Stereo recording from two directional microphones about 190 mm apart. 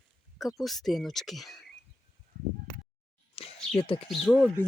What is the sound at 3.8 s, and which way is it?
Speech, 30° left (ahead or behind).